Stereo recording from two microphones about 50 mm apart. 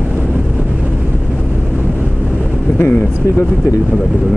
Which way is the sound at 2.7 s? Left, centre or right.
Left.